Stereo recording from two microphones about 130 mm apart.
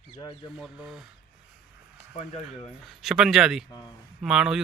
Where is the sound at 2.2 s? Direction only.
60° left (ahead or behind).